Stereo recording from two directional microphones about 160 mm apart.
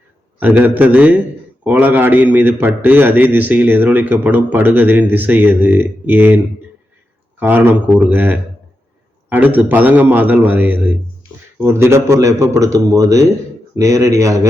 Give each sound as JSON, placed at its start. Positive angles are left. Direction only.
{"t": 0.3, "sound": "a man's voice", "side_deg": -10}